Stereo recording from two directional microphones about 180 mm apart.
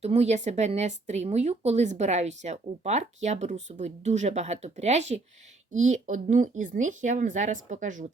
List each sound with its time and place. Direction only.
0.0 s speech: 35° right (ahead or behind)